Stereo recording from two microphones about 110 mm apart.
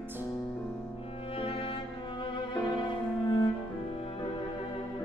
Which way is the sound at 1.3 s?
55° left (ahead or behind).